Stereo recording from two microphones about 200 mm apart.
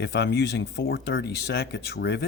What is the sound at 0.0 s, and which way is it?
Speech, 55° left (ahead or behind).